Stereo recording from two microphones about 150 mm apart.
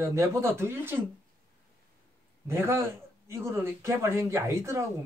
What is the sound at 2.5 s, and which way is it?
Speech, 20° right (ahead or behind).